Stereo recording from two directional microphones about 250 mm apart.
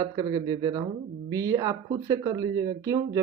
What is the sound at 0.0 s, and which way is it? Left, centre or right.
Speech, centre.